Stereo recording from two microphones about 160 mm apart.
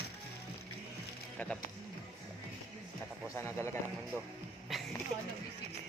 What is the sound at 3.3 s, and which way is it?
Speech, 15° left (ahead or behind).